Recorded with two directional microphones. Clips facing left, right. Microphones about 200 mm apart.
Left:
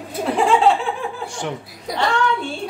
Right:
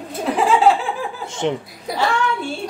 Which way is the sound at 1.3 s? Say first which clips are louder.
Right 6 dB; 20° right (ahead or behind).